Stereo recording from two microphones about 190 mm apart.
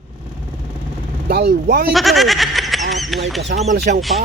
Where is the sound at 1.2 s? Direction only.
55° right (ahead or behind).